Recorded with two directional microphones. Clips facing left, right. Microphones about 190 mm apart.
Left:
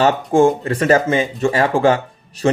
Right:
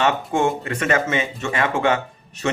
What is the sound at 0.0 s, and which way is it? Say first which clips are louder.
Speech: left 7 dB; 35° left (ahead or behind).